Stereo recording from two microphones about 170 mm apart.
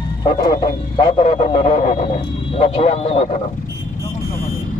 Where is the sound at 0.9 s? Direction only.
35° left (ahead or behind).